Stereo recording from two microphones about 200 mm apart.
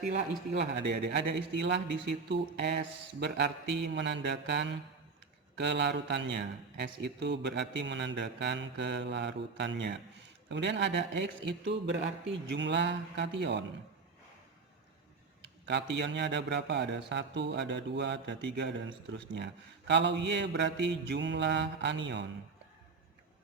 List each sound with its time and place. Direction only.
0.7 s a man's voice: 60° right (ahead or behind)
15.6 s a man's voice: 60° right (ahead or behind)